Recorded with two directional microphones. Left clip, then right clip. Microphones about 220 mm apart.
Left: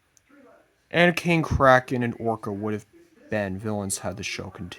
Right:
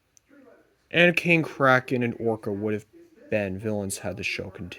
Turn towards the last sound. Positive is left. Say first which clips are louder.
# right 2 dB
turn(degrees=20)  # may be behind; listen again after turning